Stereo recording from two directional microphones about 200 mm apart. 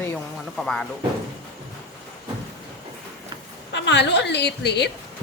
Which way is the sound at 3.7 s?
60° left (ahead or behind).